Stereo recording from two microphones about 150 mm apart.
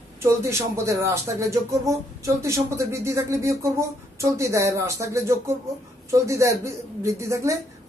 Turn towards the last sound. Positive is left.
turn(degrees=-20)  # may be behind; listen again after turning